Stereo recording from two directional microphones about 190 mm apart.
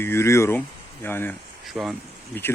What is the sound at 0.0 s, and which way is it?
Speech, 15° left (ahead or behind).